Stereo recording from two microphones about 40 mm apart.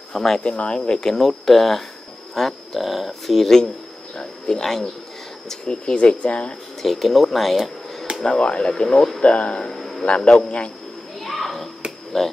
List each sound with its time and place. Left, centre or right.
0.1 s speech: centre
0.4 s speech: left
0.7 s speech: centre
6.8 s speech: centre
8.4 s speech: left
9.8 s a sound: centre
10.0 s speech: left
11.1 s children playing: centre
12.1 s speech: centre